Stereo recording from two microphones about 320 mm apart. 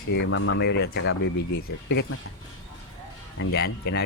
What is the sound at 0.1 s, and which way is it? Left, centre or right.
Speech, left.